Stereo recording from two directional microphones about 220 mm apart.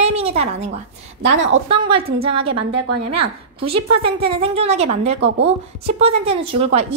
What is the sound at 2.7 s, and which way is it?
Speech, 90° right.